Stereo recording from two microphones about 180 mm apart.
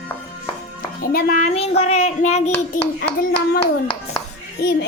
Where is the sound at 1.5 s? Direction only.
35° left (ahead or behind).